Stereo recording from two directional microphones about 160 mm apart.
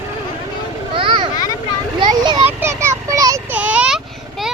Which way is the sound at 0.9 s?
30° right (ahead or behind).